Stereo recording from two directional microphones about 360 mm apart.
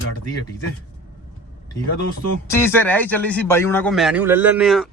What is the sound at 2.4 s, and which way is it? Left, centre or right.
A man's voice, centre.